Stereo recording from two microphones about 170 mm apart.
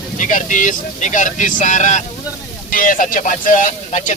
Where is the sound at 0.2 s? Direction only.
50° left (ahead or behind).